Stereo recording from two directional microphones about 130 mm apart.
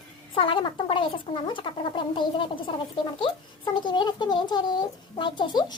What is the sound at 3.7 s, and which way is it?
Speech, 35° left (ahead or behind).